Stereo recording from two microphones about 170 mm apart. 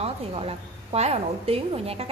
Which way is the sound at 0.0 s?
35° right (ahead or behind).